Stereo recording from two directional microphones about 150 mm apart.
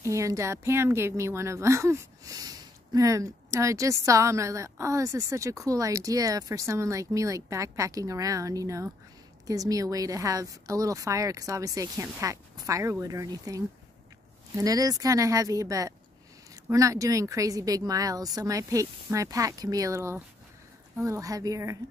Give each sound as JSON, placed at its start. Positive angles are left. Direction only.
{"t": 0.0, "sound": "a woman's voice", "side_deg": -20}
{"t": 14.6, "sound": "a woman's voice", "side_deg": -25}